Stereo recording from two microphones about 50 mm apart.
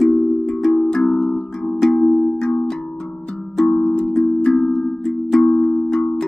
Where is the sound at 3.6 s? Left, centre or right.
Centre.